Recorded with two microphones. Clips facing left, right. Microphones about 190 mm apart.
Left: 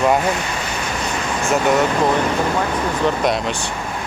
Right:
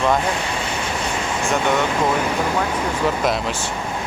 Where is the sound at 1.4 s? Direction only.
5° left (ahead or behind).